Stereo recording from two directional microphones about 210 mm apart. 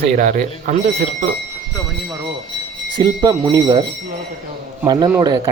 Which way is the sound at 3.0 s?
20° right (ahead or behind).